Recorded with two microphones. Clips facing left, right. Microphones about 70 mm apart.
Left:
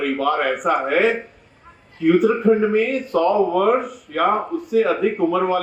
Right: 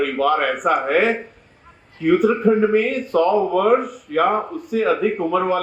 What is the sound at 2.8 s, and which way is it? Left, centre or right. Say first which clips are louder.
Speech: right 1 dB; right.